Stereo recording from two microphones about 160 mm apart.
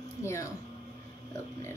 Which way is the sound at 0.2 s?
15° left (ahead or behind).